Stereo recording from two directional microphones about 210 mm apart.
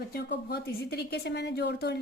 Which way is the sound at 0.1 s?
50° left (ahead or behind).